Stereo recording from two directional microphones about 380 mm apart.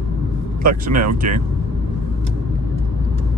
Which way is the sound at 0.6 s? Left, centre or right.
Right.